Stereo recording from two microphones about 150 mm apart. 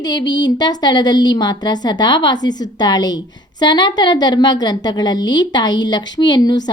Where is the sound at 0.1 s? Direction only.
25° left (ahead or behind).